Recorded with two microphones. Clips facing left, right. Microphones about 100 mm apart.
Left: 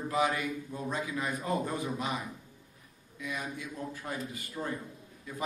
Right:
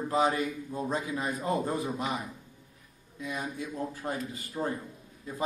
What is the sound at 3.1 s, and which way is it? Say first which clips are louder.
A man's voice: right 3 dB; 25° right (ahead or behind).